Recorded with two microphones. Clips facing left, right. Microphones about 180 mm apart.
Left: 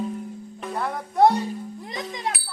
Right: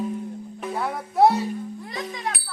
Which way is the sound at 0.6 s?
5° right (ahead or behind).